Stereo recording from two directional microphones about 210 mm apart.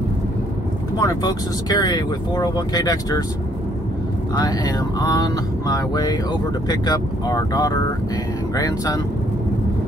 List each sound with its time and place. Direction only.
0.9 s speech: 15° left (ahead or behind)
4.4 s vehicle: 20° left (ahead or behind)
8.5 s speech: 15° left (ahead or behind)